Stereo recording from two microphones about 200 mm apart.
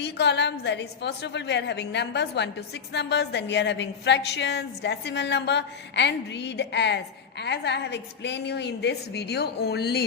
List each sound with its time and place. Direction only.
0.0 s a woman's voice: 60° left (ahead or behind)